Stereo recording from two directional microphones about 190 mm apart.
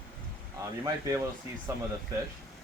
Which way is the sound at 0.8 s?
20° right (ahead or behind).